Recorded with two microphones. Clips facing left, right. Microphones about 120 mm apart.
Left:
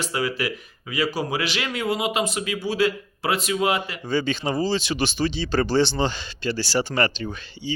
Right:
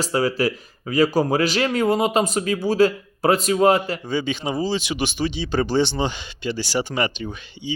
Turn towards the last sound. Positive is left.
turn(degrees=-15)  # may be behind; listen again after turning